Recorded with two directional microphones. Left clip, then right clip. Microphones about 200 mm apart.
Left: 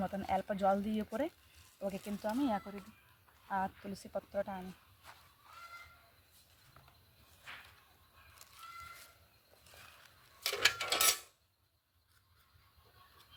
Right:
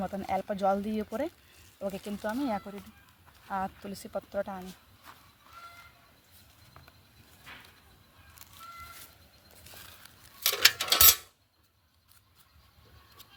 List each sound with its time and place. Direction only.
0.0 s speech: 25° right (ahead or behind)
1.8 s speech: 40° right (ahead or behind)
3.5 s speech: 35° right (ahead or behind)
5.1 s goat: 15° right (ahead or behind)
10.0 s a sound: 50° right (ahead or behind)